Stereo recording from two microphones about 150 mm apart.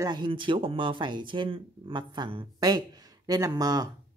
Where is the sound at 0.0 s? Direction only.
30° right (ahead or behind).